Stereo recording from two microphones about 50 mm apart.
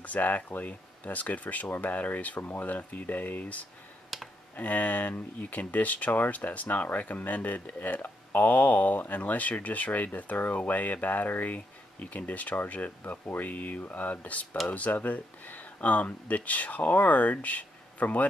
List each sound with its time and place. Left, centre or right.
0.0 s speech: left
4.1 s computer keyboard: centre
4.6 s speech: left